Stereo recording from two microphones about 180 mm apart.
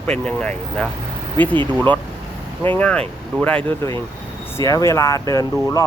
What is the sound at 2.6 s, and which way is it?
Speech, 10° left (ahead or behind).